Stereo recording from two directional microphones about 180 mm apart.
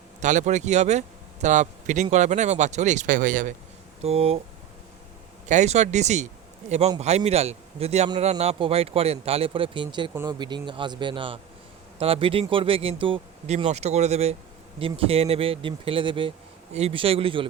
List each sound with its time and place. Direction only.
0.2 s speech: 40° right (ahead or behind)
4.0 s speech: 35° right (ahead or behind)
5.5 s speech: 40° right (ahead or behind)